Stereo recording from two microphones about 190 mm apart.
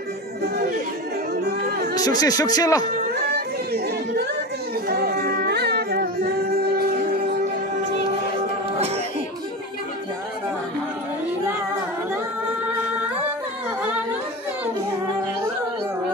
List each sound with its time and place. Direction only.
2.0 s speech: 20° left (ahead or behind)
3.3 s a sound: 55° right (ahead or behind)
4.8 s music: 55° right (ahead or behind)
8.7 s music: 35° right (ahead or behind)